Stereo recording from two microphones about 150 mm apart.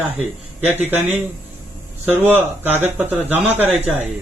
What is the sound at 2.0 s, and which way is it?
Speech, 10° right (ahead or behind).